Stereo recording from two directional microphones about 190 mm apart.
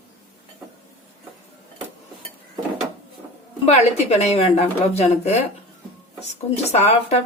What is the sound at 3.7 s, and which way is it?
Speech, 35° left (ahead or behind).